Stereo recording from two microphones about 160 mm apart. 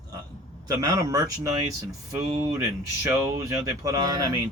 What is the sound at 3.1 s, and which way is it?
Speech, 20° right (ahead or behind).